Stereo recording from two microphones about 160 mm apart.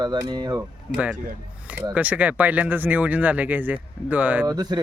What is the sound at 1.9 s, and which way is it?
Speech, 10° right (ahead or behind).